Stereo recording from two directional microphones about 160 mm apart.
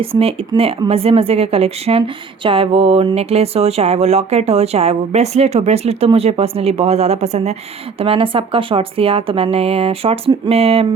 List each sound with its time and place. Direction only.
0.0 s speech: 35° right (ahead or behind)